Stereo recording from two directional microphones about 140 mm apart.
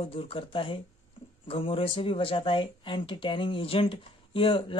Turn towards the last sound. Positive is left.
turn(degrees=40)  # may be behind; listen again after turning